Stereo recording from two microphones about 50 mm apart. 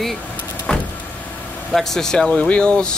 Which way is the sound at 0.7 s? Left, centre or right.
Centre.